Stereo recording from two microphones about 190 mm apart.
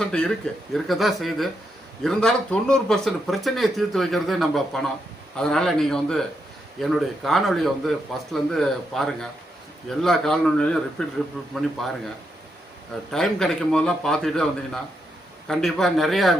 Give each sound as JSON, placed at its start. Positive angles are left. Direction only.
{"t": 0.0, "sound": "speech", "side_deg": 5}
{"t": 13.1, "sound": "speech", "side_deg": 0}